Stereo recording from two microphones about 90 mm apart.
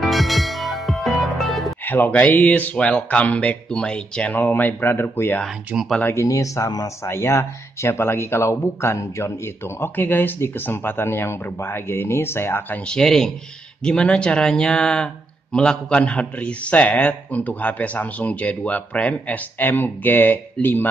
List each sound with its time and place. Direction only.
0.0 s music: centre (ahead or behind)
1.9 s a man's voice: 20° left (ahead or behind)
6.2 s speech: 35° left (ahead or behind)
7.1 s speech: 30° left (ahead or behind)
12.8 s a man's voice: 5° left (ahead or behind)